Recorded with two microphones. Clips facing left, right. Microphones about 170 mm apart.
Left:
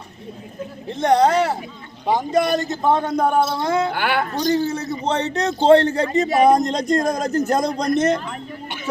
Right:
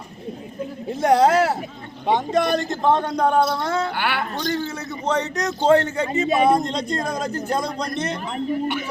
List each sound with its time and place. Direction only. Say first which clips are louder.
0.9 s a man's voice: even; 5° right (ahead or behind); by 3.9 s 15° left (ahead or behind)
3.9 s a man's voice: left 3 dB; 50° left (ahead or behind)
4.6 s a man's voice: left 4 dB; 35° left (ahead or behind)